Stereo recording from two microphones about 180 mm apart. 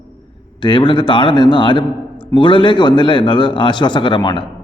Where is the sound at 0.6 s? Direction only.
25° left (ahead or behind).